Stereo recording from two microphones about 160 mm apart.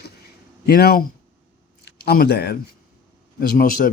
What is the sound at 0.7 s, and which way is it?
Speech, 75° left (ahead or behind).